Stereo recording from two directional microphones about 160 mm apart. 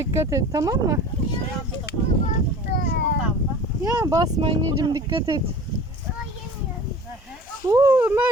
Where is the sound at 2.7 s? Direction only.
85° left.